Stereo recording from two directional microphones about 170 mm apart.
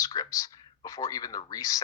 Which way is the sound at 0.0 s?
20° left (ahead or behind).